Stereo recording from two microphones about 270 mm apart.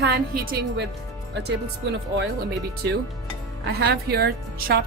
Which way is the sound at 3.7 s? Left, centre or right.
Right.